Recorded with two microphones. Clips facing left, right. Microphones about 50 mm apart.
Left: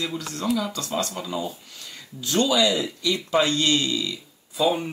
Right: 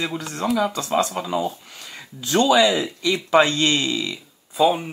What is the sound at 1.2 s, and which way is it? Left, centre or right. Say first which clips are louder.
Speech: right 5 dB; right.